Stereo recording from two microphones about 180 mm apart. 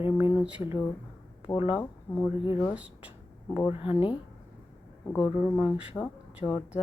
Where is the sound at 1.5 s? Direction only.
30° left (ahead or behind).